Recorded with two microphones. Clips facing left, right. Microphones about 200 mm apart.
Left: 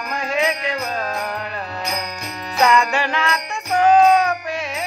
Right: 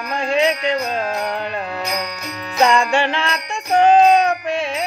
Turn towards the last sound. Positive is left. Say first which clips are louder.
# right 4 dB
turn(degrees=-25)  # may be behind; listen again after turning